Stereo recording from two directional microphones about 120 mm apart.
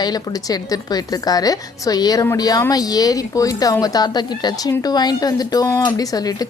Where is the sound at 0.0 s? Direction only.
35° left (ahead or behind).